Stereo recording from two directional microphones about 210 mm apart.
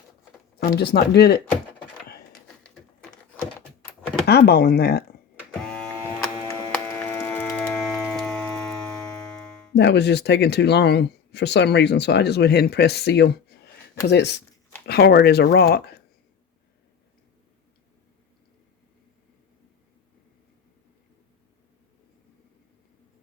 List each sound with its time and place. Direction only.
0.6 s speech: 50° left (ahead or behind)
3.0 s a sound: 5° left (ahead or behind)
4.3 s speech: 50° left (ahead or behind)
5.7 s printer: 5° left (ahead or behind)
6.5 s wood: 10° left (ahead or behind)
8.0 s a sound: centre (ahead or behind)
9.7 s speech: 55° left (ahead or behind)